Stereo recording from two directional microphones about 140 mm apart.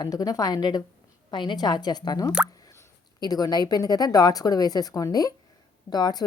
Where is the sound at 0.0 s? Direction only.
25° left (ahead or behind).